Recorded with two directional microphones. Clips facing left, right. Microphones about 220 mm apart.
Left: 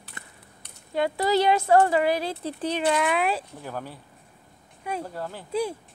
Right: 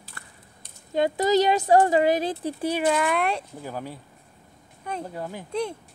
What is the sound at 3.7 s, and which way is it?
Speech, 10° right (ahead or behind).